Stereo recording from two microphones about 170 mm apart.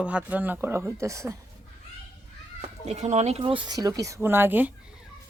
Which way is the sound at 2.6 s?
40° right (ahead or behind).